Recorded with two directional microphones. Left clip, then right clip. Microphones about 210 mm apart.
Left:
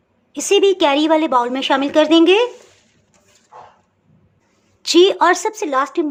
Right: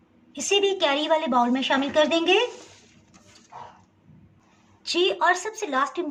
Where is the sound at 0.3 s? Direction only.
50° left (ahead or behind).